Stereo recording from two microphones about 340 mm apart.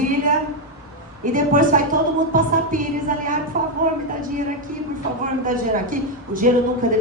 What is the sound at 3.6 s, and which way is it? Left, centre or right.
Music, right.